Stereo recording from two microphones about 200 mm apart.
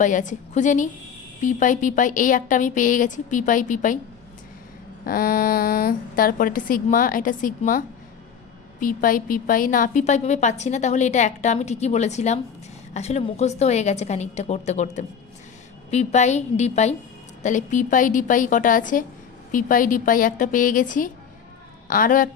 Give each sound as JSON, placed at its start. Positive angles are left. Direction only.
{"t": 0.0, "sound": "a woman's voice", "side_deg": 40}
{"t": 5.0, "sound": "a woman's voice", "side_deg": 45}